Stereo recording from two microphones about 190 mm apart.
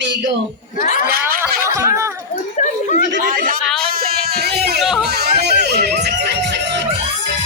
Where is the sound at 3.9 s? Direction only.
55° right (ahead or behind).